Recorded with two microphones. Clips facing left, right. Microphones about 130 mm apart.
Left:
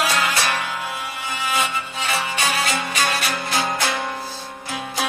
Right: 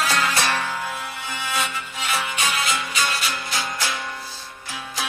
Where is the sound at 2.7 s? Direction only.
50° left (ahead or behind).